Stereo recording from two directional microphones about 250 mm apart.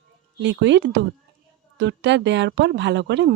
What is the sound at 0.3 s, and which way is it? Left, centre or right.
Speech, right.